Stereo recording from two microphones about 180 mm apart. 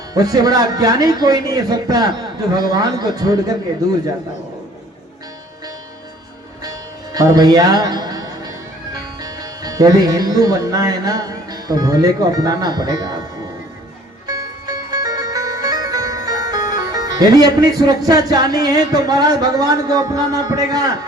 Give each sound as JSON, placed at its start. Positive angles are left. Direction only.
{"t": 0.1, "sound": "speech", "side_deg": -20}
{"t": 7.1, "sound": "speech", "side_deg": -20}
{"t": 14.8, "sound": "music", "side_deg": -20}